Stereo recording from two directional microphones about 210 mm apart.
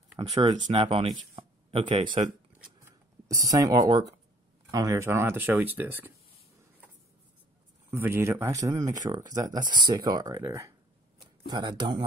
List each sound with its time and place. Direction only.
0.2 s speech: 25° right (ahead or behind)
1.3 s a sound: 25° right (ahead or behind)
3.4 s speech: 15° right (ahead or behind)
7.9 s speech: 10° right (ahead or behind)